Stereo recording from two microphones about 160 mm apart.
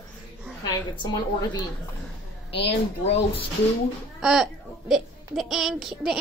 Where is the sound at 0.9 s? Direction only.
25° left (ahead or behind).